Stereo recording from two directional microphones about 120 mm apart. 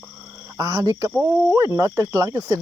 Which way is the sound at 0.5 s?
30° right (ahead or behind).